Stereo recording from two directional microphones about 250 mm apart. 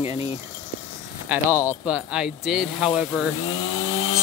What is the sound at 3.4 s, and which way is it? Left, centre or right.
Chainsaw, left.